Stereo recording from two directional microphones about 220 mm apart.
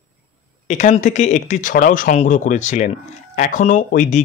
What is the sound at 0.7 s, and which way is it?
A man's voice, 35° left (ahead or behind).